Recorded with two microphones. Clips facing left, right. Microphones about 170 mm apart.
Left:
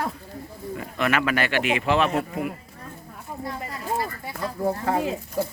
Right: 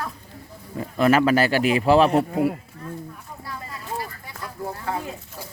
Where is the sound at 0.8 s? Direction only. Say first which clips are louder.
Right 7 dB; 30° right (ahead or behind).